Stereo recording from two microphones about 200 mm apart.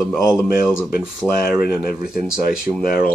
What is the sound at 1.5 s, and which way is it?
Speech, 5° right (ahead or behind).